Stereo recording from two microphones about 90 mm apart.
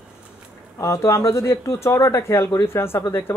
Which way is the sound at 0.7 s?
30° left (ahead or behind).